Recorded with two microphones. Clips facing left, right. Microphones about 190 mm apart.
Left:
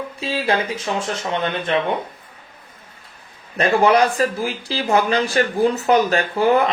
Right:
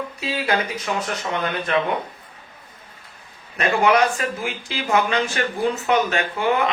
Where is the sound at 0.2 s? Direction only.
30° left (ahead or behind).